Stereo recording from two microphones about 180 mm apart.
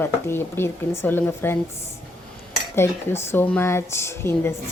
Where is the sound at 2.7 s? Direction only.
15° left (ahead or behind).